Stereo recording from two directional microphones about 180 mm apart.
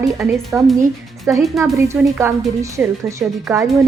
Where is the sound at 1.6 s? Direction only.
15° right (ahead or behind).